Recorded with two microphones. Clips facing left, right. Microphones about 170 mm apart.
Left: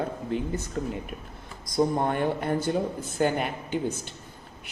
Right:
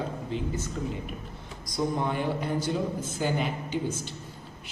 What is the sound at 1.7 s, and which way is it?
A man's voice, 50° left (ahead or behind).